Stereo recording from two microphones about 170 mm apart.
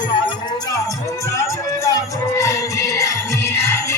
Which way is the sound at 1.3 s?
20° left (ahead or behind).